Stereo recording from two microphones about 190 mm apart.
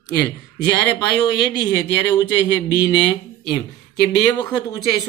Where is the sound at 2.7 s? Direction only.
20° left (ahead or behind).